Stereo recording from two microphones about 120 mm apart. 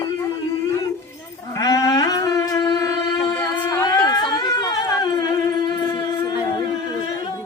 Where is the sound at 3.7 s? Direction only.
25° left (ahead or behind).